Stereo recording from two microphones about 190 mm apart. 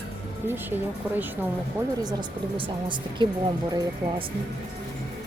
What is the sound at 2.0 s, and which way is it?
Speech, 25° right (ahead or behind).